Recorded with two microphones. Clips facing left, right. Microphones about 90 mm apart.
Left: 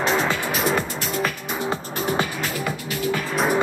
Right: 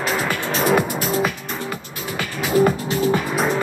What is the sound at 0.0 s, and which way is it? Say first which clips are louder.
Music: left 1 dB; 5° right (ahead or behind).